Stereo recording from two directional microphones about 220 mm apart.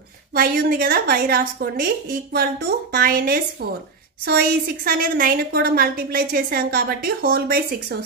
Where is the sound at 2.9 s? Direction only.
45° right (ahead or behind).